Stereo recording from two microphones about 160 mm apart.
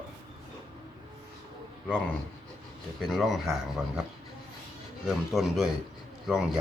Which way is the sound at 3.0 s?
Centre (ahead or behind).